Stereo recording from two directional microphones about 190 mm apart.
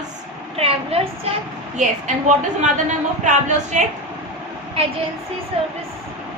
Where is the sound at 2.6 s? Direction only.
40° right (ahead or behind).